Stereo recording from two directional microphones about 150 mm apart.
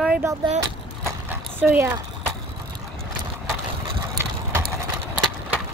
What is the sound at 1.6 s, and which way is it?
Speech, 15° right (ahead or behind).